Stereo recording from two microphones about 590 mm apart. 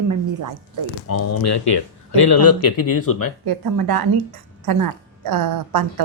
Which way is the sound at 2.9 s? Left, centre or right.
Left.